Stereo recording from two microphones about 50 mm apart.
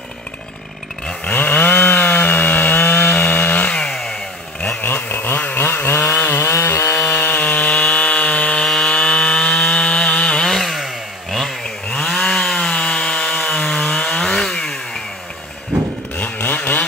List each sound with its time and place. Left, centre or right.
1.2 s chainsaw: left
3.8 s chainsaw: centre
4.8 s chainsaw: left
6.5 s chainsaw: left
7.1 s wood: left
10.5 s chainsaw: centre
11.9 s chainsaw: centre
16.2 s chainsaw: left